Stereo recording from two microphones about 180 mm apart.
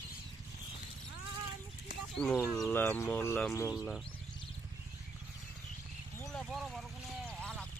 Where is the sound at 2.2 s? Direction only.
5° left (ahead or behind).